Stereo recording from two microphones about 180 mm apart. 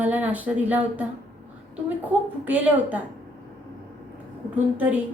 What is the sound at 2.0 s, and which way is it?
Speech, 5° right (ahead or behind).